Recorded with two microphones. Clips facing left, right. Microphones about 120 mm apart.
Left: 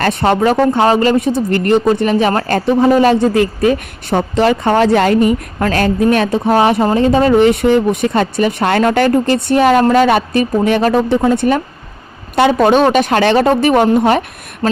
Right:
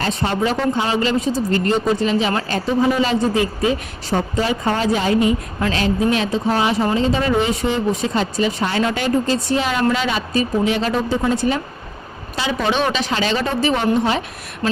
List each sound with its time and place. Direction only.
0.0 s speech: 65° left (ahead or behind)